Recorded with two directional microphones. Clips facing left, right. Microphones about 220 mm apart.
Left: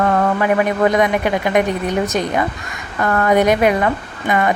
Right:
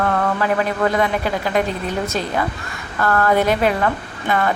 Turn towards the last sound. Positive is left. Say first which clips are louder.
# left 2 dB
turn(degrees=15)  # may be behind; listen again after turning